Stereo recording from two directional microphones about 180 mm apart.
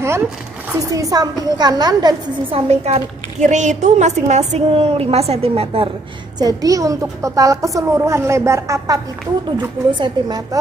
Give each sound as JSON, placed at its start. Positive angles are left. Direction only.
{"t": 0.7, "sound": "a woman's voice", "side_deg": -20}
{"t": 2.7, "sound": "a woman's voice", "side_deg": -35}
{"t": 6.4, "sound": "a woman's voice", "side_deg": -20}